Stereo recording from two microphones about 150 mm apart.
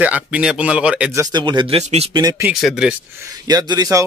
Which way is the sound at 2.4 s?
5° right (ahead or behind).